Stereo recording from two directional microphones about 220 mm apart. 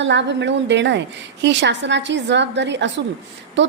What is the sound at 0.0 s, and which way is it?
A woman's voice, 50° right (ahead or behind).